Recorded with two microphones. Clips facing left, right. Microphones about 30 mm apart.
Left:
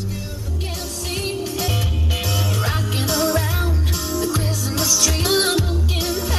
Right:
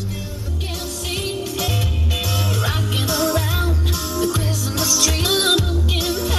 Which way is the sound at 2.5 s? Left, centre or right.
Centre.